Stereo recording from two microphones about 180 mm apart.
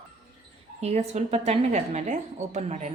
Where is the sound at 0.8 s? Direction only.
35° right (ahead or behind).